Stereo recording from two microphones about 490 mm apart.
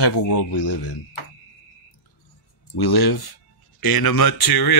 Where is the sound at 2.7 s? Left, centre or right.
Left.